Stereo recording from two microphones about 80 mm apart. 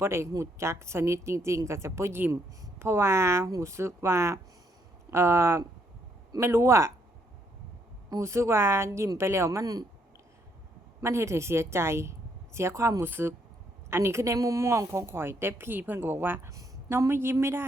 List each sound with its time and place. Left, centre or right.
0.0 s a woman's voice: right
8.1 s a woman's voice: right
11.0 s a woman's voice: right
16.5 s a woman's voice: right